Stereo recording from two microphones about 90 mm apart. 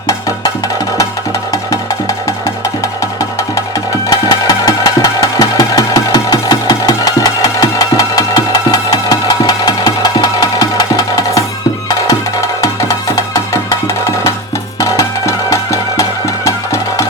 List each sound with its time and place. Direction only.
0.1 s music: 40° left (ahead or behind)
4.1 s music: 45° left (ahead or behind)
5.4 s engine: 45° left (ahead or behind)
13.1 s music: 40° left (ahead or behind)